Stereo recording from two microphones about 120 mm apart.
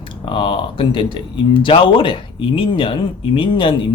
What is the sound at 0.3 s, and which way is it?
Speech, 45° left (ahead or behind).